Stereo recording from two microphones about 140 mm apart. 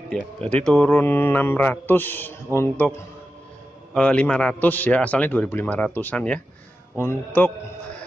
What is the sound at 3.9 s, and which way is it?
Speech, 10° left (ahead or behind).